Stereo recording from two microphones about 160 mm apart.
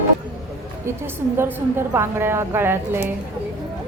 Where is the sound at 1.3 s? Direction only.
15° right (ahead or behind).